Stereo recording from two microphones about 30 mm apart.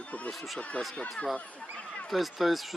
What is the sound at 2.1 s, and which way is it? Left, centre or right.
Speech, centre.